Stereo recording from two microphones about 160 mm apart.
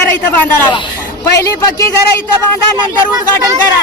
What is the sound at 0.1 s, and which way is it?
A man's voice, 15° left (ahead or behind).